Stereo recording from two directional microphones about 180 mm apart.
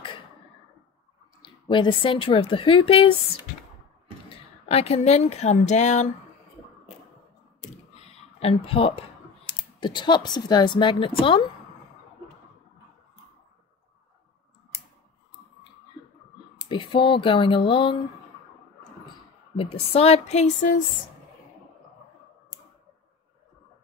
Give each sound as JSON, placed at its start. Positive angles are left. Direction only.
{"t": 1.4, "sound": "speech", "side_deg": 25}
{"t": 4.3, "sound": "speech", "side_deg": 35}
{"t": 7.9, "sound": "a sound", "side_deg": 35}
{"t": 9.8, "sound": "speech", "side_deg": 25}
{"t": 16.6, "sound": "speech", "side_deg": 25}
{"t": 19.5, "sound": "a woman's voice", "side_deg": 35}